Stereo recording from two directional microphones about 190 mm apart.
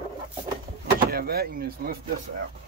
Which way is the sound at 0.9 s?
55° right (ahead or behind).